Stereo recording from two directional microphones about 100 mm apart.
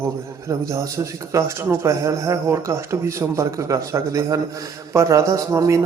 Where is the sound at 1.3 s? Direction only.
30° right (ahead or behind).